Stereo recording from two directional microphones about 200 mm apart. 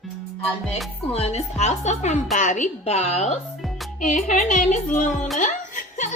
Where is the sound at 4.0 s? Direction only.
40° left (ahead or behind).